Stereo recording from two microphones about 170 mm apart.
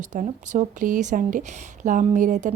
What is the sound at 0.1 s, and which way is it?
Speech, 45° right (ahead or behind).